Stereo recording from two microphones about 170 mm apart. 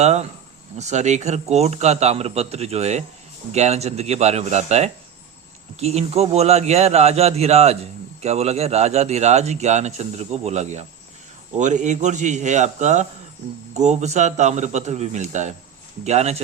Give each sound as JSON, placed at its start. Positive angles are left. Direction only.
{"t": 0.0, "sound": "a man's voice", "side_deg": -40}